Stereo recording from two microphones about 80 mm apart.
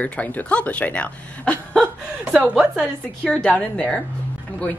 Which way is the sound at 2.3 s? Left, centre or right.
Centre.